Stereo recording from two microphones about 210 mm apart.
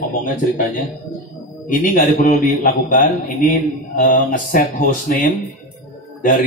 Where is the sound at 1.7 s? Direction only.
40° left (ahead or behind).